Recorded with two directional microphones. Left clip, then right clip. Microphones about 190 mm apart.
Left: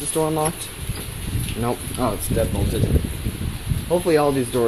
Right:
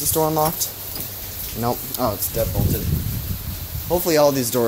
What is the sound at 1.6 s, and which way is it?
Speech, 10° right (ahead or behind).